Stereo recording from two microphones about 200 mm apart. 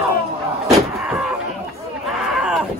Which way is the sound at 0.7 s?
5° right (ahead or behind).